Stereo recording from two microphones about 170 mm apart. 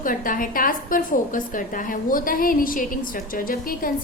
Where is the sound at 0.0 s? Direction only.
55° left (ahead or behind).